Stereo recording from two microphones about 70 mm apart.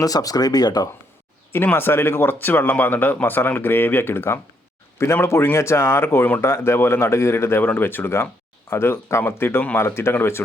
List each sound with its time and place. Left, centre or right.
0.0 s speech: left
1.5 s speech: left